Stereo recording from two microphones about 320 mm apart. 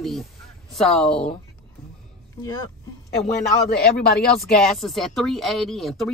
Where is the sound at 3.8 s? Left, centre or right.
Left.